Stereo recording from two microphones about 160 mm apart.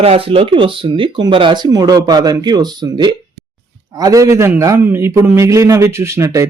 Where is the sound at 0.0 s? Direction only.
35° right (ahead or behind).